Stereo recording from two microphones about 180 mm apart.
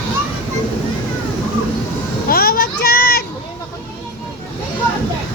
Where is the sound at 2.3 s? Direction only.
55° left (ahead or behind).